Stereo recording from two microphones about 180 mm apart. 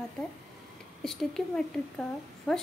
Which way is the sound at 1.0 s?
Centre (ahead or behind).